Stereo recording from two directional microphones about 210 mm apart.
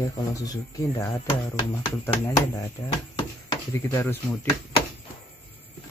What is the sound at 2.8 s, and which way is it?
Speech, 25° left (ahead or behind).